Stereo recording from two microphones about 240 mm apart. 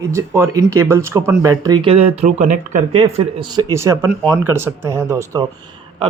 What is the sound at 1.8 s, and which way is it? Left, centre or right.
A man's voice, right.